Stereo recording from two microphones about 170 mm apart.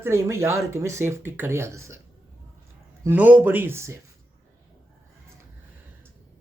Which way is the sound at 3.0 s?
10° right (ahead or behind).